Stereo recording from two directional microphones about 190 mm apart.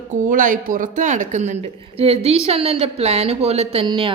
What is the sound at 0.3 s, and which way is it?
Speech, 45° right (ahead or behind).